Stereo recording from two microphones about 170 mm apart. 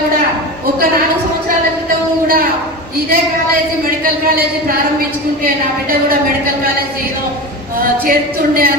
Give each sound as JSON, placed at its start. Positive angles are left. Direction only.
{"t": 7.8, "sound": "speech", "side_deg": -60}